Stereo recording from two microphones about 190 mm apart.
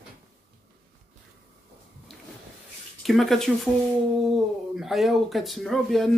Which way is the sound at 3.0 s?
Centre (ahead or behind).